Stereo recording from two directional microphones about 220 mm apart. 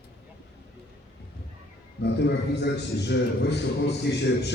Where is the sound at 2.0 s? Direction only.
50° left (ahead or behind).